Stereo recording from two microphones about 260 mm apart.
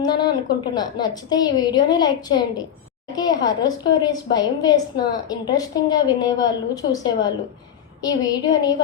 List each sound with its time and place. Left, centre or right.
0.0 s a woman's voice: centre